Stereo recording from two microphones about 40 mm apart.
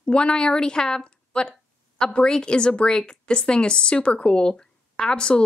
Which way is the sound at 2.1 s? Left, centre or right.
Left.